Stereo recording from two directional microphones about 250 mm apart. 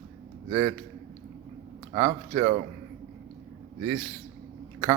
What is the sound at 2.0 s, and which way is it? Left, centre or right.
Speech, right.